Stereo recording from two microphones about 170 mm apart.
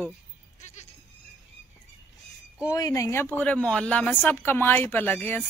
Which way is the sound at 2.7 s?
20° left (ahead or behind).